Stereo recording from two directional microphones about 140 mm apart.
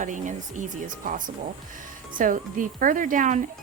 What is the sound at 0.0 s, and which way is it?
Speech, 65° right (ahead or behind).